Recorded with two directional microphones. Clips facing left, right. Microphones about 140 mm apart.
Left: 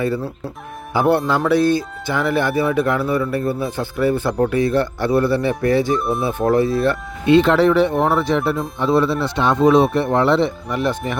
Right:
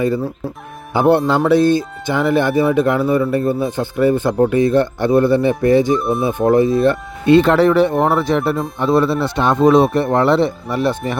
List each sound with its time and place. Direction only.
0.9 s speech: 25° right (ahead or behind)
6.0 s speech: centre (ahead or behind)
6.2 s speech: 20° right (ahead or behind)
7.3 s speech: 45° right (ahead or behind)